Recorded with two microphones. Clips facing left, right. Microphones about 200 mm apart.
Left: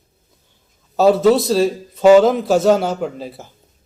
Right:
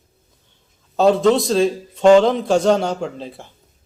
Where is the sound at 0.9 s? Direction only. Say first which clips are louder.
Left 2 dB; 5° left (ahead or behind).